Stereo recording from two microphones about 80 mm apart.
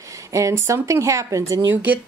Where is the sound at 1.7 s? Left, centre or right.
Right.